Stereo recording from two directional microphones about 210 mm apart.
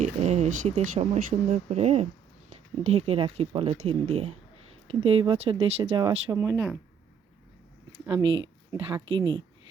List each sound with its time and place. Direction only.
0.0 s speech: 30° right (ahead or behind); by 6.7 s 15° right (ahead or behind)
7.9 s speech: 20° right (ahead or behind)